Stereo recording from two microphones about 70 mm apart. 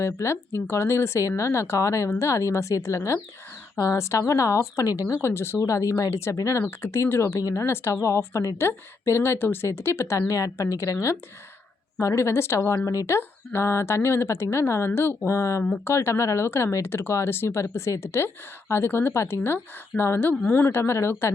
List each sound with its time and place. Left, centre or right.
0.0 s a woman's voice: left
5.0 s a woman's voice: left
10.2 s a woman's voice: left
13.1 s a woman's voice: left